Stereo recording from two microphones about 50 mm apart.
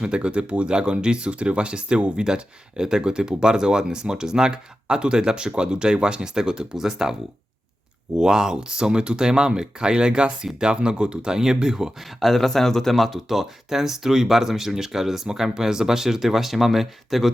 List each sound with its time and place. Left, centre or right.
0.0 s speech: right
12.2 s speech: centre